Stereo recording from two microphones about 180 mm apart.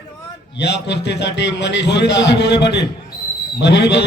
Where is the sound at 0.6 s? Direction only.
70° left (ahead or behind).